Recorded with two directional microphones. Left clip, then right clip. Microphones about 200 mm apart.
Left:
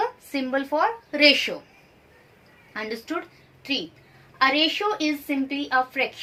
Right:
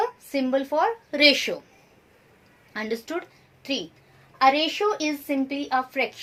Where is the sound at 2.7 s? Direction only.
55° right (ahead or behind).